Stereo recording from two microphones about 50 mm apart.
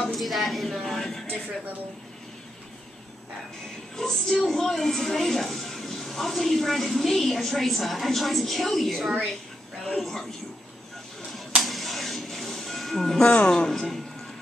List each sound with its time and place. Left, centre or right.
0.1 s a sound: centre
3.9 s speech: centre
11.3 s music: centre